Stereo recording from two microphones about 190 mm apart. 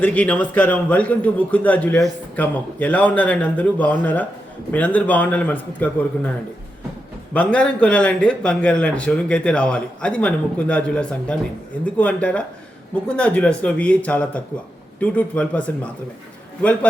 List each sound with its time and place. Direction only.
0.0 s a man's voice: 10° left (ahead or behind)
7.3 s a man's voice: 5° left (ahead or behind)